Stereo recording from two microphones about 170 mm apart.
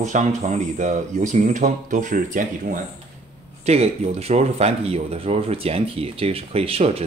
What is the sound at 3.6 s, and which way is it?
Speech, 40° right (ahead or behind).